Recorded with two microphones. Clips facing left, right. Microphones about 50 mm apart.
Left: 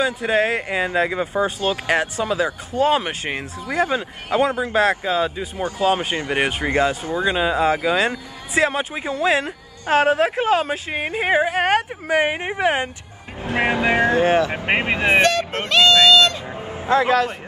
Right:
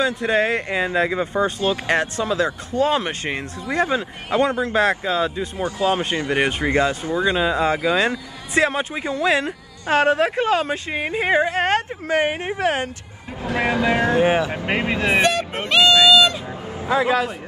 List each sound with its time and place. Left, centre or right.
0.0 s speech: centre
6.1 s speech: left
6.4 s speech: centre
12.3 s speech: left
14.1 s speech: centre
14.5 s speech: left
15.2 s speech: centre
16.6 s vehicle: left